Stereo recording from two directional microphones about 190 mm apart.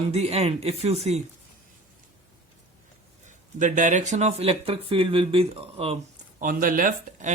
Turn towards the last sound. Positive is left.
turn(degrees=-45)  # may be behind; listen again after turning